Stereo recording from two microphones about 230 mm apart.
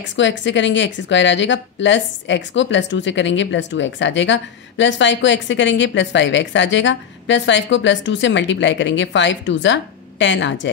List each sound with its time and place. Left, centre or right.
0.1 s a woman's voice: left